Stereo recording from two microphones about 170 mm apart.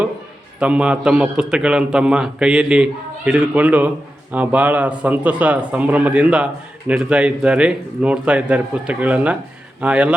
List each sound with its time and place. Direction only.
0.6 s a man's voice: 5° right (ahead or behind)